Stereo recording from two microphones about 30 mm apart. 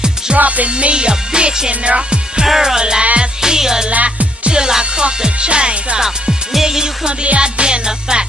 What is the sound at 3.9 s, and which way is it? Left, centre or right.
Music, right.